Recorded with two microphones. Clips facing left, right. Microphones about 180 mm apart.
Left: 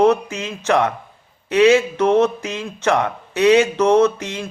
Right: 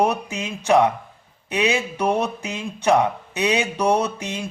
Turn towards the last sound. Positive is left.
turn(degrees=-15)  # may be behind; listen again after turning